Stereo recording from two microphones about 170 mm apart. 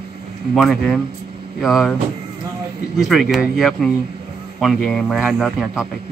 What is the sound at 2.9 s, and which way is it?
Speech, centre (ahead or behind).